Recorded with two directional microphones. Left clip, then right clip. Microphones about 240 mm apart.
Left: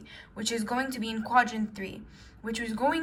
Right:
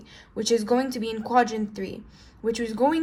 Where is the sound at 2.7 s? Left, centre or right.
Right.